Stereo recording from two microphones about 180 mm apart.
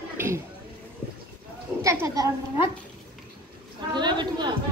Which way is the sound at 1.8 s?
15° right (ahead or behind).